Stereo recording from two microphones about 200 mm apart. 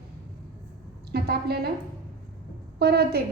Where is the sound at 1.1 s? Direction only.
55° right (ahead or behind).